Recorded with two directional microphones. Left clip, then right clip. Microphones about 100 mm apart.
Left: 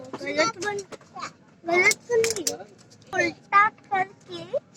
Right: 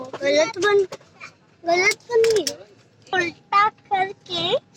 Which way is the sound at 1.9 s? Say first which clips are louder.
Right 4 dB; 30° right (ahead or behind).